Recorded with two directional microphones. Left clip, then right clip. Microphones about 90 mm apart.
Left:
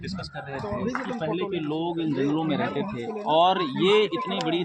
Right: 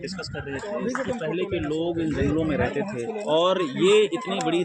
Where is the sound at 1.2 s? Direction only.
40° left (ahead or behind).